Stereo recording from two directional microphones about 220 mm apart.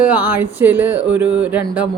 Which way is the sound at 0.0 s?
10° right (ahead or behind).